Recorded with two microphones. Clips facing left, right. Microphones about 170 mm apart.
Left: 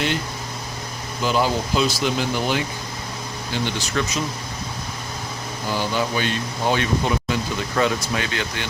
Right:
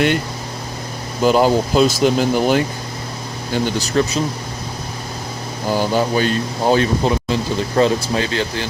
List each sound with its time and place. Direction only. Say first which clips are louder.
1.2 s speech: right 7 dB; 45° right (ahead or behind)
5.7 s speech: right 6 dB; 40° right (ahead or behind)